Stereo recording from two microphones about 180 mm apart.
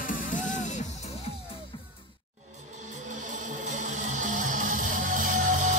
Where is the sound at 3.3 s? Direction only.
45° right (ahead or behind).